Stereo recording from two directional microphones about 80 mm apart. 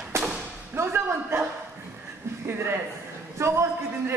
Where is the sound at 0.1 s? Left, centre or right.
Right.